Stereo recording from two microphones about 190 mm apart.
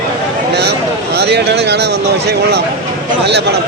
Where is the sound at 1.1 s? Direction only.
60° right (ahead or behind).